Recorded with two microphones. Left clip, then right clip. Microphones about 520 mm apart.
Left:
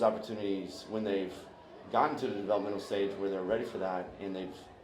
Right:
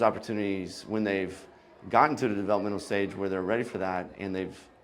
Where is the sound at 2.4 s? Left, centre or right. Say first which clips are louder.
Right 4 dB; right.